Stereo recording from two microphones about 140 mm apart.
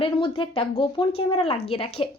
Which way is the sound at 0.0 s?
40° left (ahead or behind).